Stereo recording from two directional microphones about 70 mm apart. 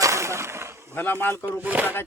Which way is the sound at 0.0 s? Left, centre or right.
Right.